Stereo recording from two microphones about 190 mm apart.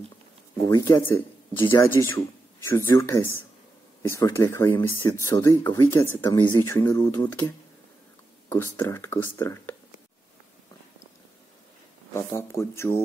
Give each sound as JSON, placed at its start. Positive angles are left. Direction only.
{"t": 0.7, "sound": "speech", "side_deg": 15}
{"t": 12.1, "sound": "speech", "side_deg": 15}